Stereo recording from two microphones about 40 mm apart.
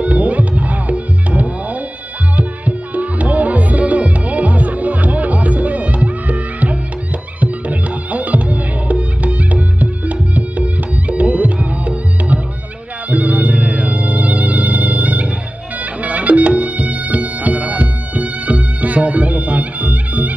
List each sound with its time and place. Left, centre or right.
0.0 s music: right